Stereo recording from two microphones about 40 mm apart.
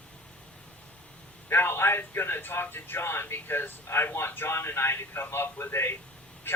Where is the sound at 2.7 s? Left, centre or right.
Left.